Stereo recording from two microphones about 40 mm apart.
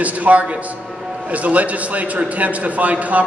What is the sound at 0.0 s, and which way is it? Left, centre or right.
A man's voice, right.